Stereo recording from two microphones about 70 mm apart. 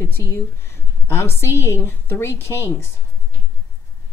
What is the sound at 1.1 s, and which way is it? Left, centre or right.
Speech, left.